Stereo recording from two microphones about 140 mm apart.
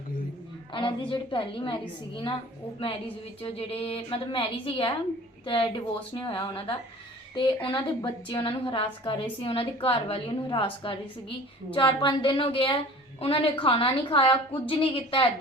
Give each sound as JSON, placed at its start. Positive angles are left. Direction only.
{"t": 0.7, "sound": "a woman's voice", "side_deg": 35}
{"t": 3.4, "sound": "a woman's voice", "side_deg": 45}